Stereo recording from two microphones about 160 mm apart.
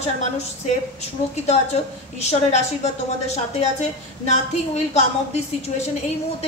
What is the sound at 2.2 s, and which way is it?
A woman's voice, 45° left (ahead or behind).